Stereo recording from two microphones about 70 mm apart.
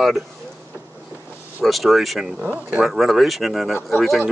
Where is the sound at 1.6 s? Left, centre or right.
Centre.